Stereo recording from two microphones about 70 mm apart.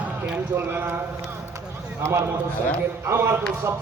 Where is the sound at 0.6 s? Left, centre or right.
Right.